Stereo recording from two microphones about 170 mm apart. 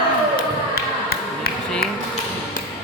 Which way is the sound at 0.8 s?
60° left (ahead or behind).